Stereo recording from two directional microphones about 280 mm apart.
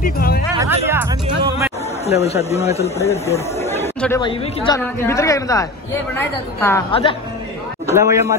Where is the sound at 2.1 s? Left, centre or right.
Left.